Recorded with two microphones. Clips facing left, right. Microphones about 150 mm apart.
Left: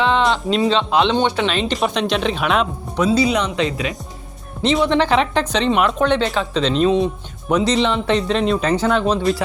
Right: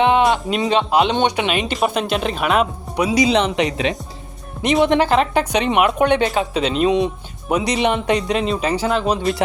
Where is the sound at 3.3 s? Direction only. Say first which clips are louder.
Right 2 dB; 20° right (ahead or behind).